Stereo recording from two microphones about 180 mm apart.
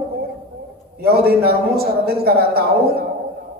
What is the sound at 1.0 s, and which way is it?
A man's voice, 60° right (ahead or behind).